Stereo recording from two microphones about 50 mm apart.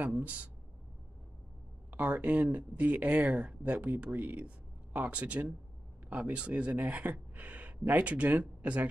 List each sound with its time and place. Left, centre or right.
0.2 s speech: right
1.9 s speech: right